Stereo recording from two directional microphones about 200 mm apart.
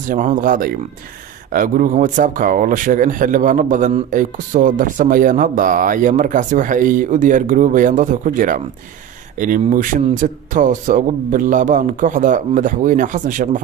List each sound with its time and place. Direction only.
0.1 s speech: 40° right (ahead or behind)